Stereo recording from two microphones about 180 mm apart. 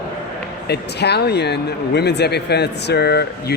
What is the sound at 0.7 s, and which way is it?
Speech, 65° left (ahead or behind).